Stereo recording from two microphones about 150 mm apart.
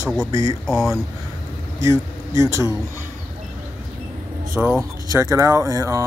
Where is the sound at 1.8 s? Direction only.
20° right (ahead or behind).